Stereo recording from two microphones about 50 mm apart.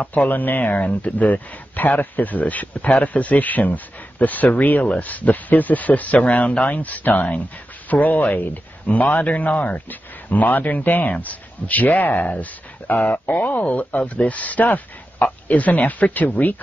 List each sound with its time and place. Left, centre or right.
0.0 s speech: left